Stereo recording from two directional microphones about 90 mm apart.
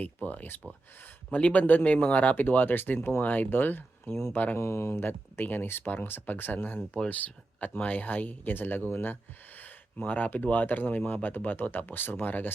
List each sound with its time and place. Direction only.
0.0 s speech: 20° left (ahead or behind)